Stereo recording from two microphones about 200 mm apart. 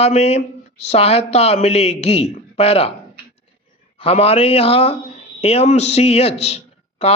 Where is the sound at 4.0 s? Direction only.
30° left (ahead or behind).